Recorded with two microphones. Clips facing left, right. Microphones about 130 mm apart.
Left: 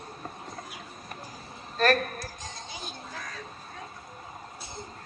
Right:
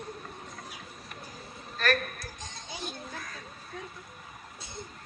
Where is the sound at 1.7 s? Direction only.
35° left (ahead or behind).